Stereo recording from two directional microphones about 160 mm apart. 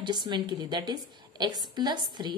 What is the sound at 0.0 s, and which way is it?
A woman's voice, 30° right (ahead or behind).